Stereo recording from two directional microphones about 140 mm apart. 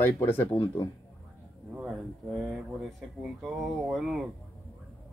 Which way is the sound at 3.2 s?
Centre (ahead or behind).